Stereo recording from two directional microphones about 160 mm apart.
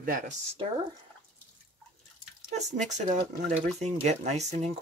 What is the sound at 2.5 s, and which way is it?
Speech, 50° right (ahead or behind).